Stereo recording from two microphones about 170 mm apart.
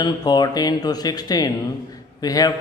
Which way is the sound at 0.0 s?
25° left (ahead or behind).